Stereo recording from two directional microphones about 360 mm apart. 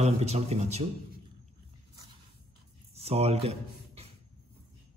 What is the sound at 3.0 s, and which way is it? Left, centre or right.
A man's voice, centre.